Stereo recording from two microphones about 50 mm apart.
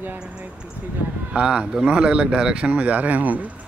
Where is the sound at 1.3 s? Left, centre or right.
Right.